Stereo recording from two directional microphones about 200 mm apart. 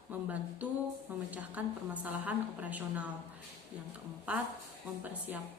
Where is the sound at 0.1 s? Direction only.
10° right (ahead or behind).